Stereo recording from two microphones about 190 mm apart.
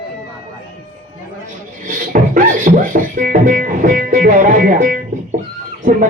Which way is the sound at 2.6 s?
45° right (ahead or behind).